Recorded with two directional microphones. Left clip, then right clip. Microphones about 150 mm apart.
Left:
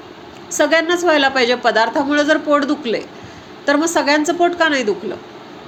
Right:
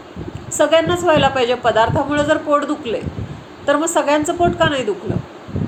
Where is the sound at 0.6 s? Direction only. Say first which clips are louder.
Even; 45° left (ahead or behind).